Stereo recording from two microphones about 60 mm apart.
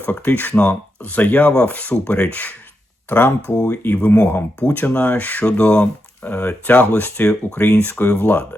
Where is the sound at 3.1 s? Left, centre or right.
Left.